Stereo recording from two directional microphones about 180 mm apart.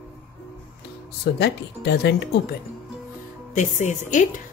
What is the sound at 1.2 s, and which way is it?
Speech, 65° left (ahead or behind).